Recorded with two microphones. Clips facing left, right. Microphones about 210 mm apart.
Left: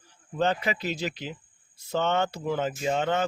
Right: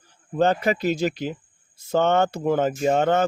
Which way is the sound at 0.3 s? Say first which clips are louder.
Right 6 dB; 45° right (ahead or behind).